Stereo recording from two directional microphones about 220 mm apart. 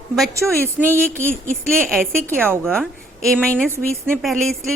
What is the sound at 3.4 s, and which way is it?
Speech, 5° left (ahead or behind).